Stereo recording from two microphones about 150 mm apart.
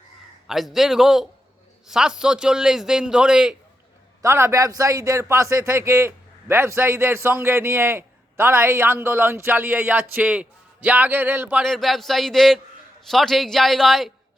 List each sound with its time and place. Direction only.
0.4 s a man's voice: centre (ahead or behind)
4.2 s a man's voice: 20° right (ahead or behind)
11.6 s a man's voice: centre (ahead or behind)